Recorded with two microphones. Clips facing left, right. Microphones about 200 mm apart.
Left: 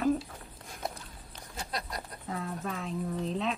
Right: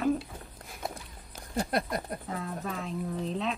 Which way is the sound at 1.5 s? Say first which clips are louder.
Right 9 dB; 55° right (ahead or behind).